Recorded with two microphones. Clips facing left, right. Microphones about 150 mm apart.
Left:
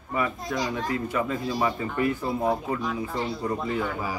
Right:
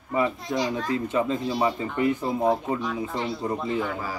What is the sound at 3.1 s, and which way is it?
Speech, 20° right (ahead or behind).